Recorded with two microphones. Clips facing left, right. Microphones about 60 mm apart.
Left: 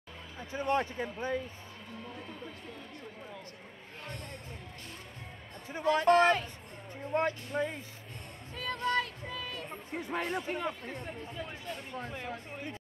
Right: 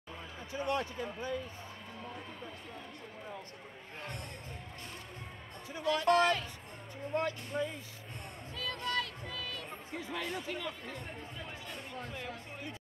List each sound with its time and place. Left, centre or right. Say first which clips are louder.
0.5 s speech: left 4 dB; left
5.7 s speech: left 4 dB; left
8.5 s music: left 5 dB; left